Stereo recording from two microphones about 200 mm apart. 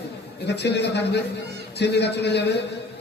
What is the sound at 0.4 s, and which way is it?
A man's voice, 60° left (ahead or behind).